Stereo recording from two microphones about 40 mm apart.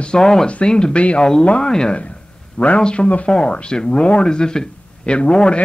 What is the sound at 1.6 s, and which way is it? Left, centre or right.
Speech, centre.